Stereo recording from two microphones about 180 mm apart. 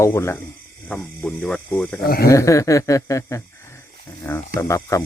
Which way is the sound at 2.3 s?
15° left (ahead or behind).